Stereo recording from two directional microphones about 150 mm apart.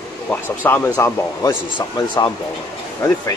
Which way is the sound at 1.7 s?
30° left (ahead or behind).